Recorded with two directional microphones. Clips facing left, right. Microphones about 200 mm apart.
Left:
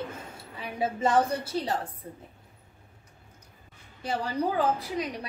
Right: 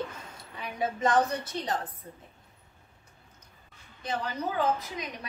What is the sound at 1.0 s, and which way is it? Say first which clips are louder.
Speech: left 1 dB; 10° left (ahead or behind).